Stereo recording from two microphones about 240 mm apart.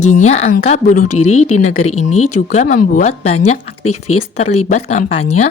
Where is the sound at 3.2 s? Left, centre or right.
Left.